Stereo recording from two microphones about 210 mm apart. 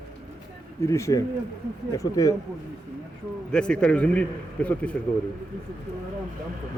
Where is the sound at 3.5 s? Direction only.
5° left (ahead or behind).